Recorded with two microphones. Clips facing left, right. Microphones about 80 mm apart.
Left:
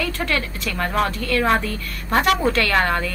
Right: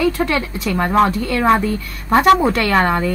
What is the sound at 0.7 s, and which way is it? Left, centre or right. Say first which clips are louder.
A woman's voice: right 7 dB; centre.